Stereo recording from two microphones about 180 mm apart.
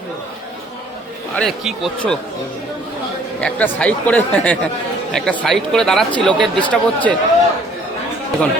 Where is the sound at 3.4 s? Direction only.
5° left (ahead or behind).